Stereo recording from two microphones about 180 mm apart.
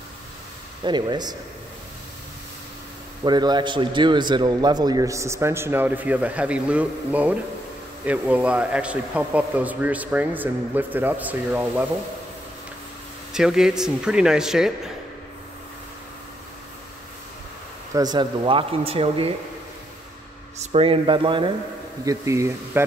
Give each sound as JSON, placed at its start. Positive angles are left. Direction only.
{"t": 0.8, "sound": "speech", "side_deg": -25}
{"t": 3.3, "sound": "a man's voice", "side_deg": -25}
{"t": 13.3, "sound": "speech", "side_deg": -5}
{"t": 17.9, "sound": "speech", "side_deg": -20}
{"t": 20.7, "sound": "a man's voice", "side_deg": -30}